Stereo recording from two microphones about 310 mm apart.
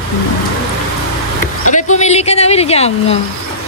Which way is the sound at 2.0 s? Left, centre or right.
Left.